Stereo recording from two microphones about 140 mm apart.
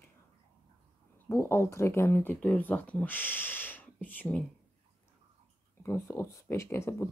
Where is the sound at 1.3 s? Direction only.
20° left (ahead or behind).